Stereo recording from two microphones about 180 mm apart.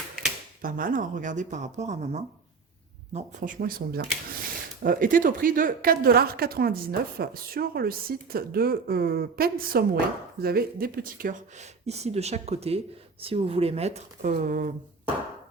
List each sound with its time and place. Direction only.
0.6 s speech: 50° right (ahead or behind)
11.9 s speech: 35° right (ahead or behind)